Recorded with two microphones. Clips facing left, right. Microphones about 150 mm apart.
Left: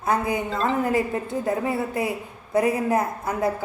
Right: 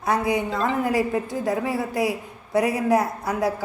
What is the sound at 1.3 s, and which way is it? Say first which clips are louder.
A woman's voice: even; centre (ahead or behind).